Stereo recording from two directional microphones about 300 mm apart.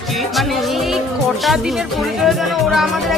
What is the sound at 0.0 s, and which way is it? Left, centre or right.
Speech, centre.